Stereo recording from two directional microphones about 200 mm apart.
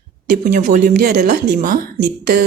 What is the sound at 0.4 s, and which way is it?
A woman's voice, 40° right (ahead or behind).